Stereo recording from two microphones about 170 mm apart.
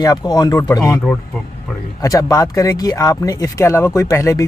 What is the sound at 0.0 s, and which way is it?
Speech, 20° left (ahead or behind).